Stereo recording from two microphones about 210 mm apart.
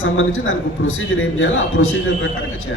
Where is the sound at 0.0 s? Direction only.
70° left (ahead or behind).